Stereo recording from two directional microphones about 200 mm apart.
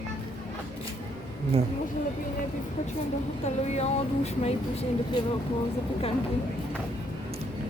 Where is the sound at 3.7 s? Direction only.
35° left (ahead or behind).